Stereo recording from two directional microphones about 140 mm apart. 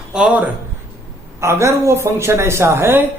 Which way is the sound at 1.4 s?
20° right (ahead or behind).